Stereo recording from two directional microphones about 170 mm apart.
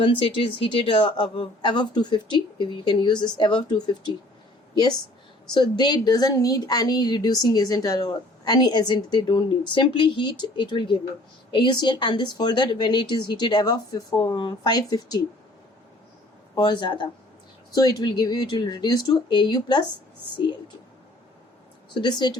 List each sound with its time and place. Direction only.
0.0 s speech: 30° left (ahead or behind)
5.5 s speech: 25° left (ahead or behind)
16.6 s speech: 25° left (ahead or behind)
21.9 s speech: 25° left (ahead or behind)